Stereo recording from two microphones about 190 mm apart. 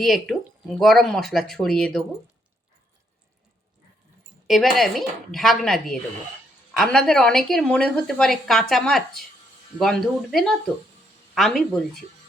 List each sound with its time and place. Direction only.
0.0 s a woman's voice: centre (ahead or behind)
4.4 s a woman's voice: centre (ahead or behind)